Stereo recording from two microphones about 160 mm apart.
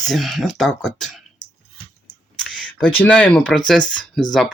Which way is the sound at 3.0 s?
10° left (ahead or behind).